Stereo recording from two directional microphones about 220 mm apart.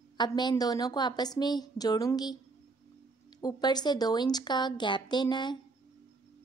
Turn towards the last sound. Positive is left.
turn(degrees=20)  # may be behind; listen again after turning